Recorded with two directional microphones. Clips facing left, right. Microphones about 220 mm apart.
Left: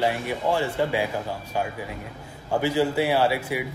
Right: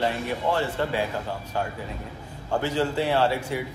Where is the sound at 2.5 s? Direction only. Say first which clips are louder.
Left 3 dB; 10° left (ahead or behind).